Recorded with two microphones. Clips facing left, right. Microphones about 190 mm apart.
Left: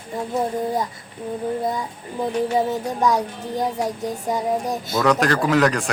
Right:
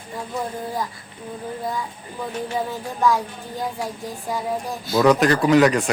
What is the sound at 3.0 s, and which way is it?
A woman's voice, 20° left (ahead or behind).